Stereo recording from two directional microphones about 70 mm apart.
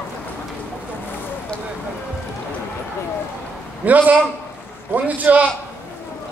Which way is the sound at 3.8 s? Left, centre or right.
Right.